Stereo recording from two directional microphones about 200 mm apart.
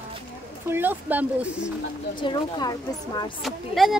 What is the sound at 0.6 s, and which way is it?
Speech, 10° right (ahead or behind).